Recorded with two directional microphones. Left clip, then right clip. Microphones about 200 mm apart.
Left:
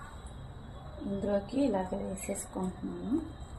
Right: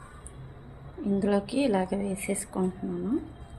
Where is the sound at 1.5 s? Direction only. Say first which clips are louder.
Right 4 dB; 50° right (ahead or behind).